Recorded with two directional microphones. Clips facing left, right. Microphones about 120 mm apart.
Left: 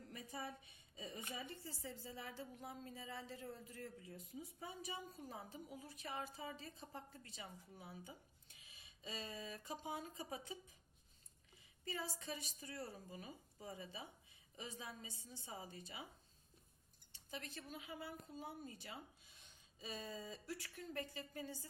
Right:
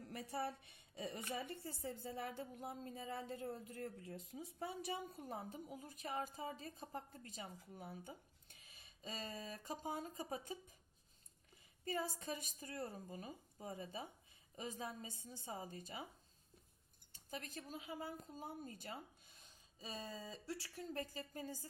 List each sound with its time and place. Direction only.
0.1 s a woman's voice: 65° right (ahead or behind); by 10.8 s 45° right (ahead or behind)
11.9 s a woman's voice: 45° right (ahead or behind)
17.1 s a woman's voice: 45° right (ahead or behind)